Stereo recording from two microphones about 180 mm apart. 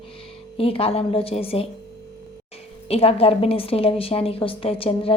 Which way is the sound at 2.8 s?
35° left (ahead or behind).